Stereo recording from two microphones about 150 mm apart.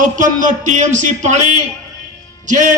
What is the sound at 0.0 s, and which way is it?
A man's voice, 60° right (ahead or behind).